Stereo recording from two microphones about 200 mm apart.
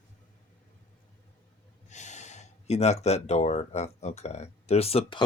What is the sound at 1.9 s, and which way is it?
Speech, 35° left (ahead or behind).